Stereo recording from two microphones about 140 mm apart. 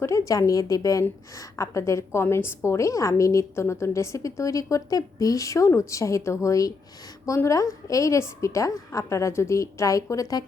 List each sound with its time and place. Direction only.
0.0 s a woman's voice: 20° left (ahead or behind)